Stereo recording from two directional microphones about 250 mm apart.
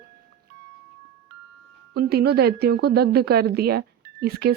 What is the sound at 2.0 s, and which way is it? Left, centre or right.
A woman's voice, right.